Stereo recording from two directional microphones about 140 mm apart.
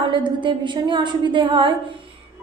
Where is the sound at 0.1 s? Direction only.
35° right (ahead or behind).